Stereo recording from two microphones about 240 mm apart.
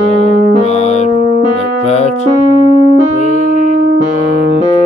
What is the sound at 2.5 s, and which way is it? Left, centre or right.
Music, left.